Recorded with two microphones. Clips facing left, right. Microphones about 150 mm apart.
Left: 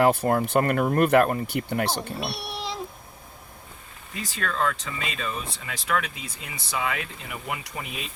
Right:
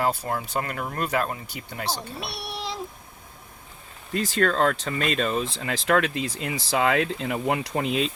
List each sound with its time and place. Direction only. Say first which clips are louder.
0.0 s speech: left 6 dB; 60° left (ahead or behind)
2.1 s a child's voice: left 2 dB; centre (ahead or behind)
4.1 s speech: right 8 dB; 90° right
5.6 s speech: right 5 dB; 90° right